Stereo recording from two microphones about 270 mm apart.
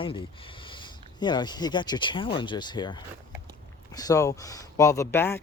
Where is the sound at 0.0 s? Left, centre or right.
Centre.